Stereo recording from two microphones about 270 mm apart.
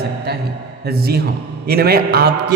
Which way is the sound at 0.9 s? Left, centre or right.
Right.